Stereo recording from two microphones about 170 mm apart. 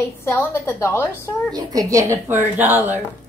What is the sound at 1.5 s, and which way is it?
A woman's voice, 20° right (ahead or behind).